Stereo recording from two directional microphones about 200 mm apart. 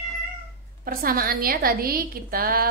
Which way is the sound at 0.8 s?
45° right (ahead or behind).